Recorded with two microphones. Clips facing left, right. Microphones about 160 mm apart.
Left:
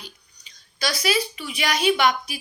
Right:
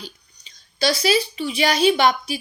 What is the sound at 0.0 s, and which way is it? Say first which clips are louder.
A woman's voice: right 5 dB; 30° right (ahead or behind).